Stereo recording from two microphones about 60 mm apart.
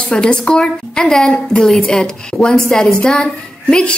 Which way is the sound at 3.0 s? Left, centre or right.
Centre.